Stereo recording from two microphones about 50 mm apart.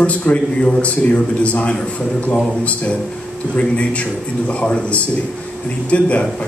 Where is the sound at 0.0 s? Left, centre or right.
Left.